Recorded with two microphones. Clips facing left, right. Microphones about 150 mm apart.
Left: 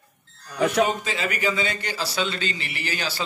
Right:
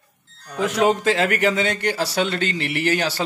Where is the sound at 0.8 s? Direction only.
90° right; by 3.2 s 65° right (ahead or behind).